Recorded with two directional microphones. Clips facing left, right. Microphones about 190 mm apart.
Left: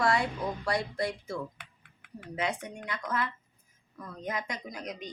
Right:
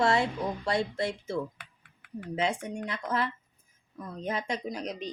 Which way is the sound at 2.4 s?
25° right (ahead or behind).